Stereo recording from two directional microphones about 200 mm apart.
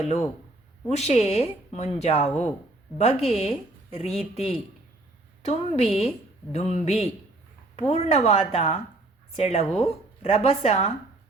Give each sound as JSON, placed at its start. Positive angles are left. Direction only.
{"t": 0.0, "sound": "speech", "side_deg": 30}
{"t": 7.8, "sound": "speech", "side_deg": 30}